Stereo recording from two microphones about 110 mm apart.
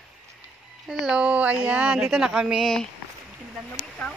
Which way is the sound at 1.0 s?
10° right (ahead or behind).